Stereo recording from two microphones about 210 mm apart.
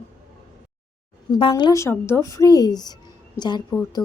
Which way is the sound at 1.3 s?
20° left (ahead or behind).